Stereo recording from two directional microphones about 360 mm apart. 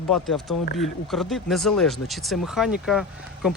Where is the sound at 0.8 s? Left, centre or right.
Centre.